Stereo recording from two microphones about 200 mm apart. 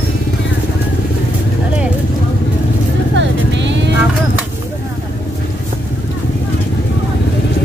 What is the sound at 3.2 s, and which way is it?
Vehicle, 65° right (ahead or behind).